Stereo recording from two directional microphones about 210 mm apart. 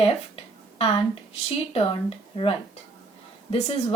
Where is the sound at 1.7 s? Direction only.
25° left (ahead or behind).